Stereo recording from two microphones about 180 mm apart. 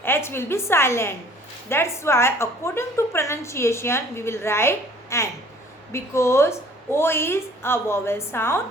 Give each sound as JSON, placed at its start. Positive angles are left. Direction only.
{"t": 0.0, "sound": "a woman's voice", "side_deg": 15}